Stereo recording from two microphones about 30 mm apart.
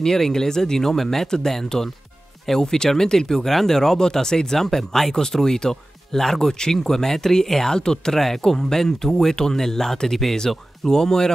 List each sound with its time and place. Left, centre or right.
0.0 s speech: centre
10.5 s speech: centre
10.9 s speech: centre